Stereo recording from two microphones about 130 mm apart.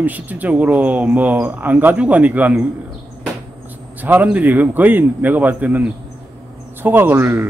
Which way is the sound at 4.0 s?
10° right (ahead or behind).